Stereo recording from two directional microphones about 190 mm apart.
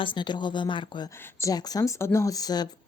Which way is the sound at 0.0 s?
25° left (ahead or behind).